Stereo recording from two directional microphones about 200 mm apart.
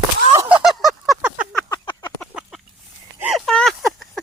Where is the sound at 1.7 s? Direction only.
20° left (ahead or behind).